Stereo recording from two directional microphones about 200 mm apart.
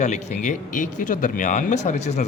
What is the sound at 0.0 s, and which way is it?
A man's voice, 35° left (ahead or behind).